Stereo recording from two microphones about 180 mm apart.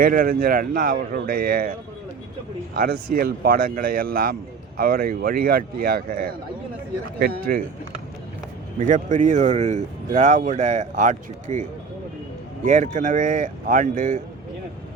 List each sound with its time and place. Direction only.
0.0 s speech: 50° right (ahead or behind)
2.7 s speech: 55° right (ahead or behind)
7.2 s speech: 55° right (ahead or behind)
8.8 s speech: 45° right (ahead or behind)
12.6 s speech: 45° right (ahead or behind)